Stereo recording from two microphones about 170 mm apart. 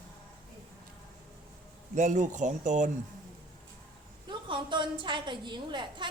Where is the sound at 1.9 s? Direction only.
45° right (ahead or behind).